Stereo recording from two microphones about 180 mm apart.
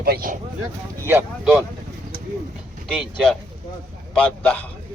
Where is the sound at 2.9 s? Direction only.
5° right (ahead or behind).